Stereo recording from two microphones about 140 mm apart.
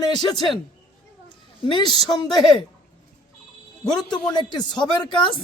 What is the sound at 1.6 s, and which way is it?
Speech, 35° left (ahead or behind).